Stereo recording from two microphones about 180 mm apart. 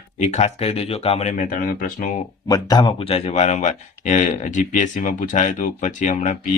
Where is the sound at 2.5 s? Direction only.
20° left (ahead or behind).